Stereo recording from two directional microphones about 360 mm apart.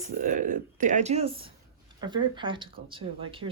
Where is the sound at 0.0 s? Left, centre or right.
Right.